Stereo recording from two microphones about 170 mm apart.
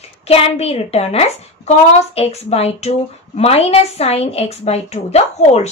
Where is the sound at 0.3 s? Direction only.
35° left (ahead or behind).